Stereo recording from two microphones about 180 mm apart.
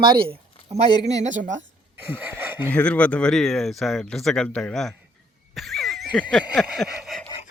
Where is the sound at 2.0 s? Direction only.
10° right (ahead or behind).